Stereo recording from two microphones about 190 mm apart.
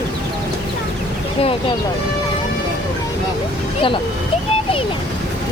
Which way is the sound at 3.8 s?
25° left (ahead or behind).